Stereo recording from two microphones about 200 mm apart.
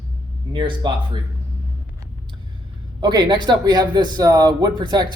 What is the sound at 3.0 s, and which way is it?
Speech, 20° right (ahead or behind).